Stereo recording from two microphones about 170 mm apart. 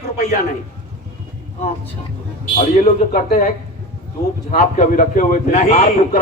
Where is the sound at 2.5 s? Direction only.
45° left (ahead or behind).